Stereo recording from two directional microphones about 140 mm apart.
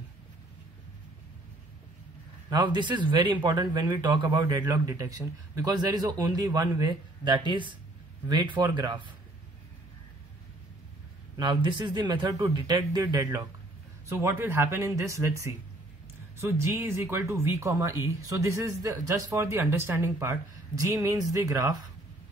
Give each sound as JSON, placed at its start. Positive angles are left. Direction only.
{"t": 2.5, "sound": "speech", "side_deg": -30}
{"t": 11.3, "sound": "speech", "side_deg": -30}
{"t": 14.0, "sound": "speech", "side_deg": -15}